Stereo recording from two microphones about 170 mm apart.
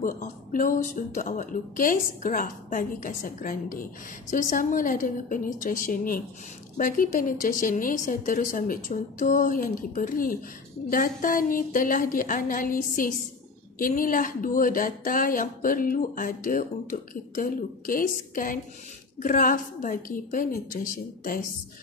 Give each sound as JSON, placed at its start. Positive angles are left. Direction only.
{"t": 0.0, "sound": "a woman's voice", "side_deg": 55}